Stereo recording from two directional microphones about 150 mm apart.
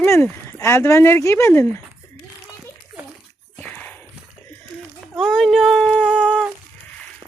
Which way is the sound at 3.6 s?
10° left (ahead or behind).